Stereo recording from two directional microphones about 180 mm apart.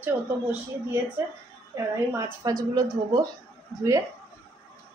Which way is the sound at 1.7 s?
15° right (ahead or behind).